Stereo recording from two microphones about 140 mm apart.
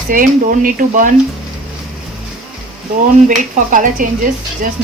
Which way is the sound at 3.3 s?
70° right (ahead or behind).